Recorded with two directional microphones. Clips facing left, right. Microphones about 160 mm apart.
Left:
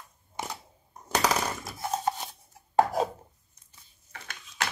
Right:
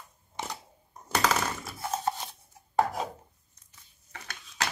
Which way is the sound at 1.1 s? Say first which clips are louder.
Left 1 dB; 15° left (ahead or behind).